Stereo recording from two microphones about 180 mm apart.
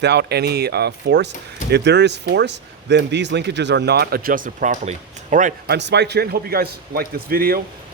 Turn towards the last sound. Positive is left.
turn(degrees=-55)  # may be behind; listen again after turning